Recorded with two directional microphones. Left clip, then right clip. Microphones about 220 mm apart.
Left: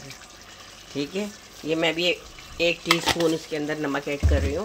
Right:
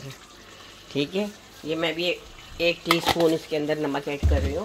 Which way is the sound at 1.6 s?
5° left (ahead or behind).